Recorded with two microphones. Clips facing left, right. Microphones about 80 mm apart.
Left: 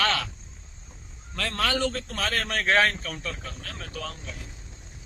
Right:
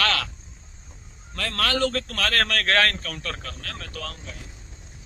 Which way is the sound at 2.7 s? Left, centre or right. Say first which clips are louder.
Left 3 dB; centre.